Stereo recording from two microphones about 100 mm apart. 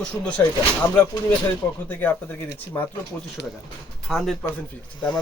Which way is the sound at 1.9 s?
20° left (ahead or behind).